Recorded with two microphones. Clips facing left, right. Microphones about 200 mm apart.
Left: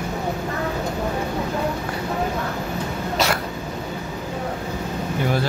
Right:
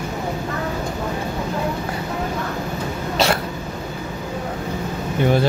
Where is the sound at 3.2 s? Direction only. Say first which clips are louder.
Right 3 dB; 30° right (ahead or behind).